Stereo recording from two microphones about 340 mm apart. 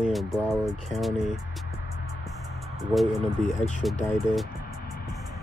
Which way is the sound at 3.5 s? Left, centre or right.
Left.